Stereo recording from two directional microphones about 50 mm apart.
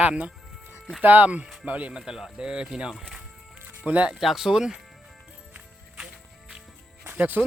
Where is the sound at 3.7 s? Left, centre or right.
Right.